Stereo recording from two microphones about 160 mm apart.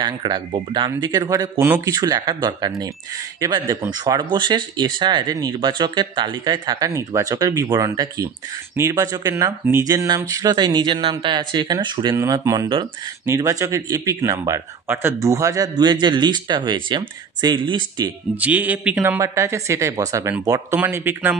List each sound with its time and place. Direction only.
0.0 s a man's voice: 25° right (ahead or behind)
18.3 s speech: 10° right (ahead or behind)